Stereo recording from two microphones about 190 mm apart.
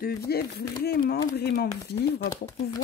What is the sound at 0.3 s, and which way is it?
Speech, 55° left (ahead or behind).